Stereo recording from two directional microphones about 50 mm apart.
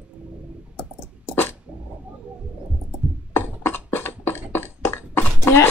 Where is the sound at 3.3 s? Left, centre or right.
Left.